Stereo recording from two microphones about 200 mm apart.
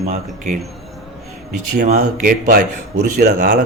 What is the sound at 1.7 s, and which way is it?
Speech, 45° right (ahead or behind).